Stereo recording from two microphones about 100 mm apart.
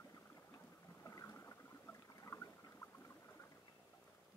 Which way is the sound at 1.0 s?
30° left (ahead or behind).